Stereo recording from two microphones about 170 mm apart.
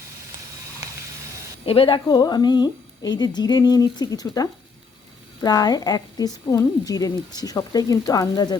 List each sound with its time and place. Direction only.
1.6 s a woman's voice: 35° left (ahead or behind)